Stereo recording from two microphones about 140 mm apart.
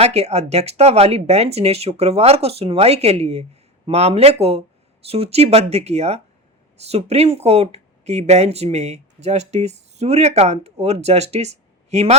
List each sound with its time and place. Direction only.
0.0 s speech: 50° right (ahead or behind)